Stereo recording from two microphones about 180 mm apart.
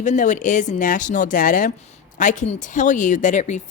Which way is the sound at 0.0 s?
45° left (ahead or behind).